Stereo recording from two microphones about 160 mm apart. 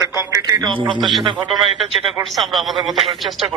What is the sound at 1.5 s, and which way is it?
Speech, centre (ahead or behind).